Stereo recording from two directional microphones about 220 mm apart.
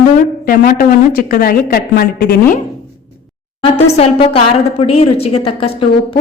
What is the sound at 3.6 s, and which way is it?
A woman's voice, 25° left (ahead or behind).